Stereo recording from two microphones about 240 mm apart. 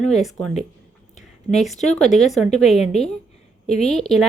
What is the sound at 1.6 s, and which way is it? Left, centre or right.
Speech, centre.